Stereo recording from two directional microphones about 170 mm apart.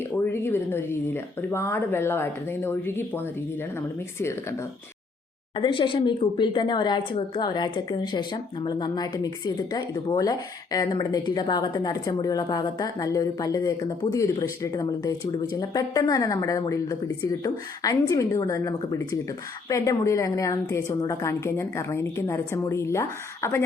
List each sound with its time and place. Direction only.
0.3 s a woman's voice: 15° left (ahead or behind)
5.5 s a woman's voice: 30° left (ahead or behind)